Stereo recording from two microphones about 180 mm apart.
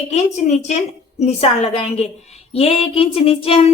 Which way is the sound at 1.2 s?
35° left (ahead or behind).